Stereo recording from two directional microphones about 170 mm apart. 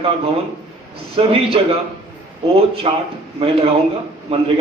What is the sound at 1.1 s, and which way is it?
Speech, 35° right (ahead or behind).